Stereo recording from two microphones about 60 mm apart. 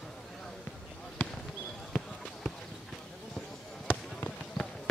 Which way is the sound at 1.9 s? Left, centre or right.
Centre.